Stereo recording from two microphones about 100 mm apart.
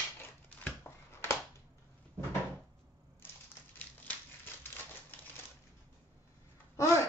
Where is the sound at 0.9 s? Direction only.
25° left (ahead or behind).